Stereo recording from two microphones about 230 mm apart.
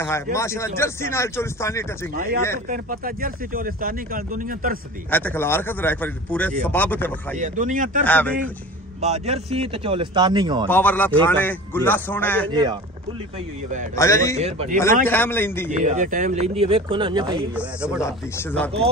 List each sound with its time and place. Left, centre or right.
0.0 s speech: centre
2.1 s speech: right
5.1 s speech: centre
7.3 s speech: right
8.0 s speech: centre
9.0 s speech: right
10.7 s speech: centre
13.9 s speech: centre
14.4 s speech: right
15.0 s speech: centre
15.7 s speech: right
17.6 s speech: centre
18.0 s speech: centre